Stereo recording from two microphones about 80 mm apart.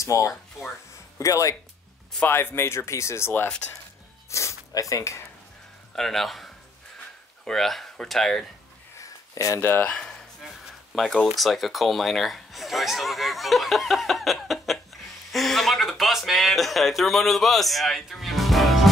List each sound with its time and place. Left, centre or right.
0.0 s speech: left
2.2 s speech: left
5.9 s speech: centre
9.0 s a sound: left
9.7 s speech: centre
11.0 s speech: centre